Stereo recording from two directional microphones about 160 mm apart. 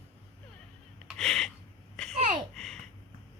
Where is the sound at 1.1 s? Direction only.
5° left (ahead or behind).